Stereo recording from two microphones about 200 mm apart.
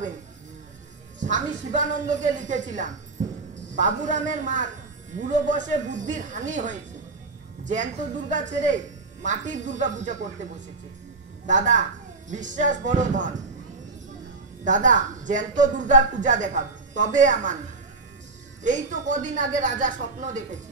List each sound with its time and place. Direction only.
1.2 s a woman's voice: 40° right (ahead or behind)
11.4 s a woman's voice: 40° right (ahead or behind)
14.6 s a woman's voice: 40° right (ahead or behind)
18.6 s a woman's voice: 40° right (ahead or behind)